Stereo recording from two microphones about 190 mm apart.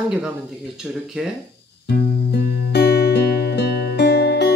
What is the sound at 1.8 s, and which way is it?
Music, 55° left (ahead or behind).